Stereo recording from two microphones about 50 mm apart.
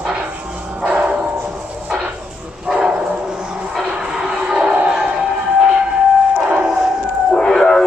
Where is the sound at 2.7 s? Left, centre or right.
Centre.